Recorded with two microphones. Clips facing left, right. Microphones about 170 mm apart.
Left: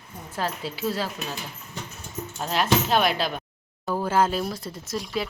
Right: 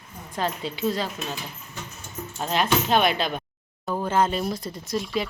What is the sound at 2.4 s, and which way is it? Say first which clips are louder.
Speech: even; centre (ahead or behind).